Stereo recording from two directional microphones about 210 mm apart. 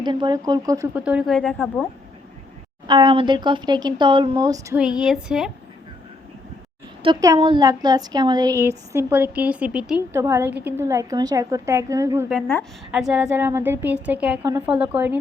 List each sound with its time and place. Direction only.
0.0 s speech: 20° right (ahead or behind)
1.0 s a woman's voice: 5° right (ahead or behind)
2.8 s speech: 20° right (ahead or behind)
4.8 s a woman's voice: 5° right (ahead or behind)
7.0 s speech: 20° right (ahead or behind)
12.9 s speech: 5° right (ahead or behind)